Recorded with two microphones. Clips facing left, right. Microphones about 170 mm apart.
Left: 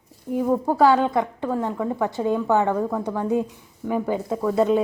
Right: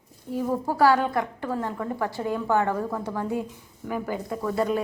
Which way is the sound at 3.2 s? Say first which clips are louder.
Left 6 dB; 20° left (ahead or behind).